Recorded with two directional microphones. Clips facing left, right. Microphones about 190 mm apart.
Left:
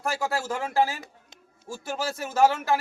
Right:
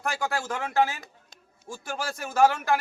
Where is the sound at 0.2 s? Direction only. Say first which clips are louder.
Left 1 dB; 25° left (ahead or behind).